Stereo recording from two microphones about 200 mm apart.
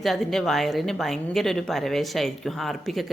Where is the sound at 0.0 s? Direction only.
Centre (ahead or behind).